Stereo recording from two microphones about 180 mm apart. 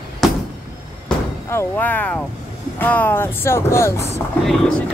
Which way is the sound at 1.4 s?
10° left (ahead or behind).